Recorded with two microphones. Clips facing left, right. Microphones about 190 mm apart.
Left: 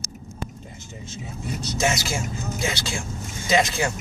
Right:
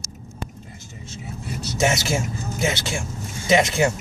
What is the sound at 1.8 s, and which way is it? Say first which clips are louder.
Speech: right 4 dB; 25° right (ahead or behind).